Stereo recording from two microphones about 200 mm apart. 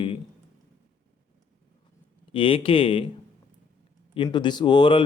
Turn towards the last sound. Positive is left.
turn(degrees=25)  # may be behind; listen again after turning